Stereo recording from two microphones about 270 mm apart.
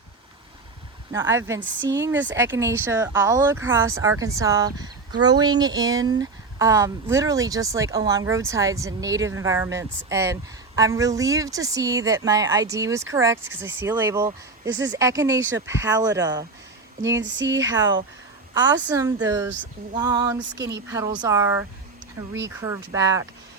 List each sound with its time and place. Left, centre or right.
1.1 s speech: centre
14.7 s speech: right
14.9 s speech: centre
17.1 s speech: right
18.5 s speech: centre